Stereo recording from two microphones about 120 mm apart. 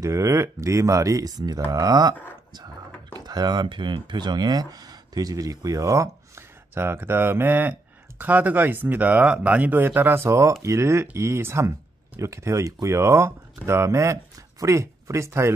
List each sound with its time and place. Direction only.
0.0 s speech: 25° right (ahead or behind)